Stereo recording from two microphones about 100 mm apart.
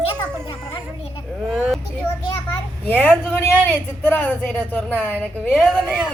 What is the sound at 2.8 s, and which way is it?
Speech, 20° left (ahead or behind).